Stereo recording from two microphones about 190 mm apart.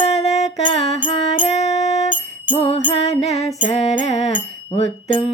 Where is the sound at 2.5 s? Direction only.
30° left (ahead or behind).